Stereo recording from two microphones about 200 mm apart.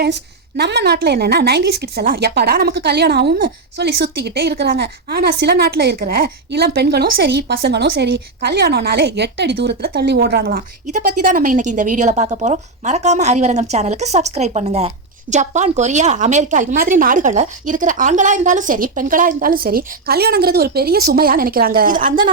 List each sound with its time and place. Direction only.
0.0 s a woman's voice: 55° right (ahead or behind)